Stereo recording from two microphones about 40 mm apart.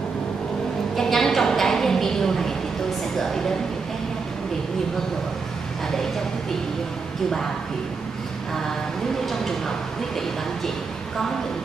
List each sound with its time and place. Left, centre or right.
0.9 s a sound: centre
3.2 s speech: centre
9.2 s speech: centre